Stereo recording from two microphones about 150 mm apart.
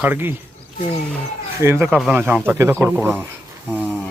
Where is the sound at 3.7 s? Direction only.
5° left (ahead or behind).